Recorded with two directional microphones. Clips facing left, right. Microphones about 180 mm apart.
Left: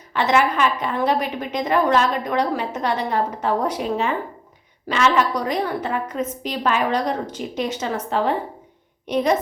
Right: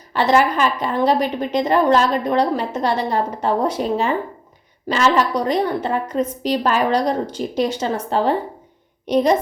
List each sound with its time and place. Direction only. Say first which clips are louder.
0.1 s a woman's voice: right 3 dB; 35° right (ahead or behind)